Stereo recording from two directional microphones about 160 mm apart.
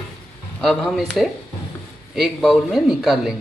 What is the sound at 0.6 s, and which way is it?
A man's voice, 5° left (ahead or behind).